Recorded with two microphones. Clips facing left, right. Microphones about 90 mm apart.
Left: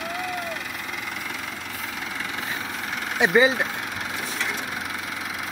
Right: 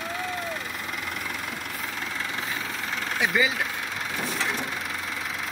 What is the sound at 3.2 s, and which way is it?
Speech, 30° left (ahead or behind).